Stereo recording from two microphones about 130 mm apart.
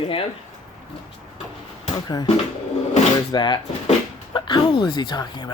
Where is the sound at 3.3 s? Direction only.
35° left (ahead or behind).